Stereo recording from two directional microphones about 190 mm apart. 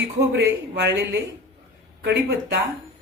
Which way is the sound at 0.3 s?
65° right (ahead or behind).